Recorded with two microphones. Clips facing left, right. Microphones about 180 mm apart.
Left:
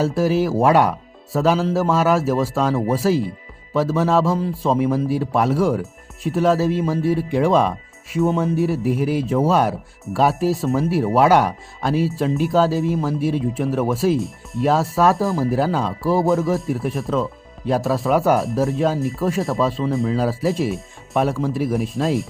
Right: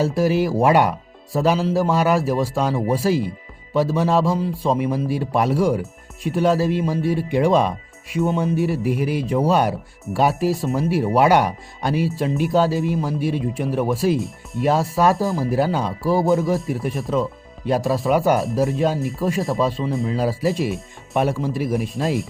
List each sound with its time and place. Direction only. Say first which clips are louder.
0.2 s speech: left 1 dB; centre (ahead or behind)
5.2 s speech: left 1 dB; 15° right (ahead or behind)
5.5 s speech: even; centre (ahead or behind)